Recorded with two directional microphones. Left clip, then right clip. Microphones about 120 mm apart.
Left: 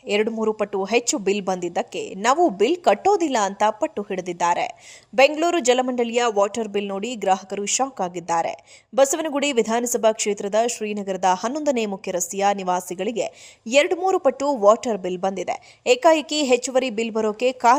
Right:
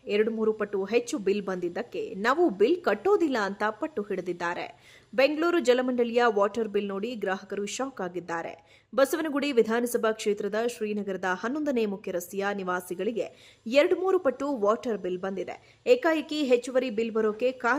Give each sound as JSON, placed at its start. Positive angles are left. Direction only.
{"t": 0.3, "sound": "a woman's voice", "side_deg": 20}